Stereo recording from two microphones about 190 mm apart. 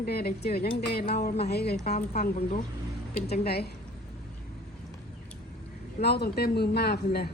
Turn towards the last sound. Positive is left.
turn(degrees=60)  # may be behind; listen again after turning